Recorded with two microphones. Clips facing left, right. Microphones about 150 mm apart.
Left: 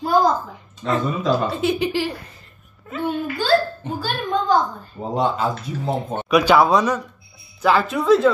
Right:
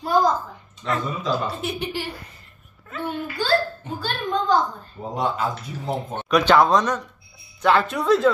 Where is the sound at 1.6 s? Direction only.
90° left.